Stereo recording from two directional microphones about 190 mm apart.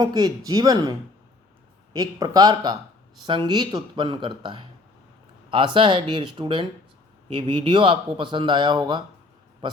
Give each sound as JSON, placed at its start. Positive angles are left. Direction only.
{"t": 0.0, "sound": "speech", "side_deg": -20}